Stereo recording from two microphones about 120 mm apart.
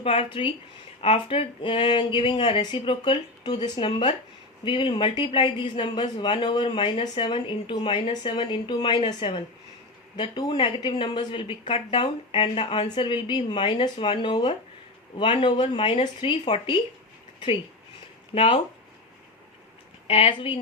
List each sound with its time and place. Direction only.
0.0 s speech: 45° left (ahead or behind)
18.3 s speech: 50° left (ahead or behind)
20.1 s speech: 50° left (ahead or behind)